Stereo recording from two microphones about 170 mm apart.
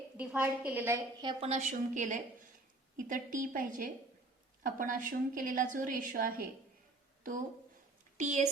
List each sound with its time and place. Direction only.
0.2 s a woman's voice: 10° right (ahead or behind)
1.2 s a woman's voice: 30° right (ahead or behind)
1.5 s a woman's voice: 45° right (ahead or behind)
8.2 s a woman's voice: 45° right (ahead or behind)